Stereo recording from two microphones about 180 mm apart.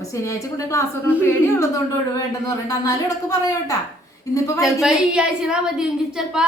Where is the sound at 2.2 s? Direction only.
20° left (ahead or behind).